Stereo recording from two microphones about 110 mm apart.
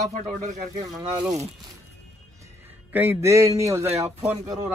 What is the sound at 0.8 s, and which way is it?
Speech, 35° right (ahead or behind).